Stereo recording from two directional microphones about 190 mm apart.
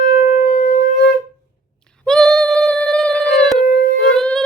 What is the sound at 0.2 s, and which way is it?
Shofar, 40° left (ahead or behind).